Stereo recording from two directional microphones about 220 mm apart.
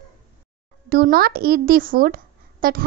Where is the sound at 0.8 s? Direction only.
45° right (ahead or behind).